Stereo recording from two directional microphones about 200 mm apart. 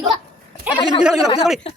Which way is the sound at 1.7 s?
30° left (ahead or behind).